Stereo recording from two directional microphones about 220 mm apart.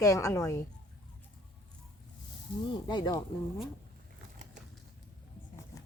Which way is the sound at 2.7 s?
20° left (ahead or behind).